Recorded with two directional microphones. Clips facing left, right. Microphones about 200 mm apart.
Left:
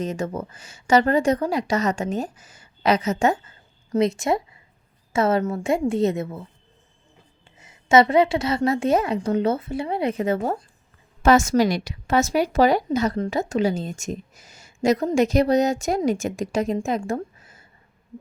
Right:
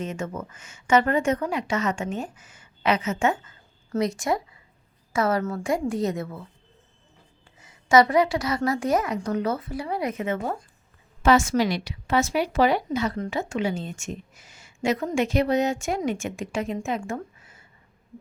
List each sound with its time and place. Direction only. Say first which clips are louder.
0.0 s speech: left 4 dB; 35° left (ahead or behind)
3.9 s a woman's voice: left 4 dB; 25° left (ahead or behind)
7.6 s a woman's voice: left 2 dB; 25° left (ahead or behind)